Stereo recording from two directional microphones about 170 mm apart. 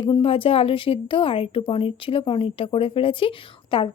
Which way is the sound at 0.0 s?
30° left (ahead or behind).